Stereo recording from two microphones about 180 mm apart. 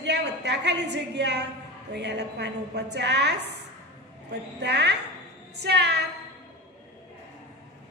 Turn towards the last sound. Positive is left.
turn(degrees=-65)  # may be behind; listen again after turning